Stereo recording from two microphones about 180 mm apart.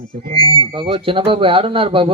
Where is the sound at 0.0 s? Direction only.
55° right (ahead or behind).